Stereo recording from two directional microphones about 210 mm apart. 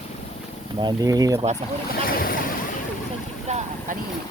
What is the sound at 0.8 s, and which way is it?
Speech, 20° right (ahead or behind).